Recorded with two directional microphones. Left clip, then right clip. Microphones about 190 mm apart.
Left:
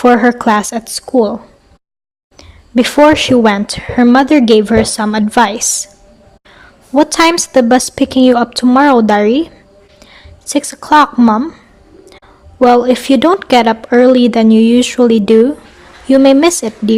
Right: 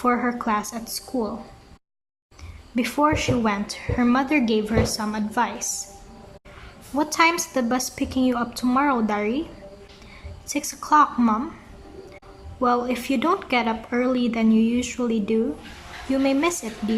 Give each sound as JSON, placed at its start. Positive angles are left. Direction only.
{"t": 0.0, "sound": "a woman's voice", "side_deg": 40}
{"t": 2.7, "sound": "a woman's voice", "side_deg": 40}
{"t": 6.9, "sound": "a woman's voice", "side_deg": 40}
{"t": 10.4, "sound": "a woman's voice", "side_deg": 40}
{"t": 12.5, "sound": "a woman's voice", "side_deg": 40}